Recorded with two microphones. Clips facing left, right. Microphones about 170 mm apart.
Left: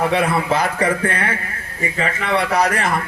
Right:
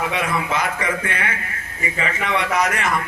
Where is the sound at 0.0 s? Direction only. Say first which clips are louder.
Left 5 dB; 35° left (ahead or behind).